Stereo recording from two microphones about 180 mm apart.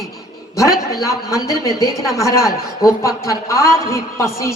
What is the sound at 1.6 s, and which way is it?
A woman's voice, 15° left (ahead or behind).